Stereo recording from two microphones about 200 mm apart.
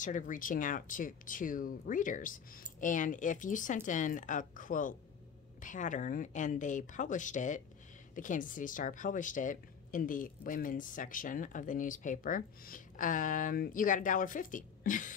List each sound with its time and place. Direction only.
0.0 s speech: 40° left (ahead or behind)